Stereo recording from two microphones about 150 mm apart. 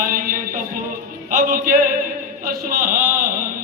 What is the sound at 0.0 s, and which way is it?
Music, 65° right (ahead or behind).